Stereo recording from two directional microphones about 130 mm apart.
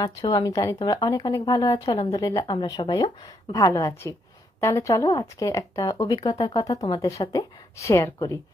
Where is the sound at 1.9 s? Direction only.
50° left (ahead or behind).